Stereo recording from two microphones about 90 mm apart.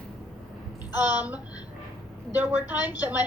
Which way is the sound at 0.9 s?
20° right (ahead or behind).